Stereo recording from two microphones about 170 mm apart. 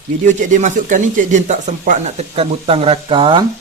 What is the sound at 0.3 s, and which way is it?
Speech, 45° right (ahead or behind).